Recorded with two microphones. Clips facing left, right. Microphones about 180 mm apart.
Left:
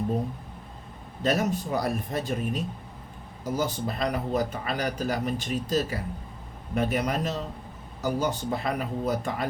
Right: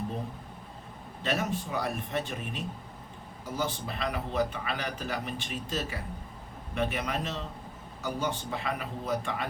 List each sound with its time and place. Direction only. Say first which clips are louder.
1.2 s a man's voice: left 5 dB; 40° left (ahead or behind)